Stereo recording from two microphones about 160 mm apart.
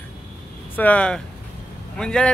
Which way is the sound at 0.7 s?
10° left (ahead or behind).